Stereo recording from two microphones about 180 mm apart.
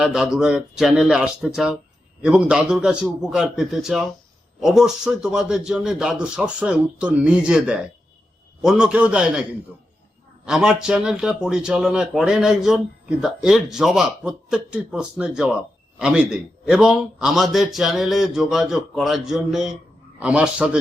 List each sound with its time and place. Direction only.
0.0 s a man's voice: 5° right (ahead or behind)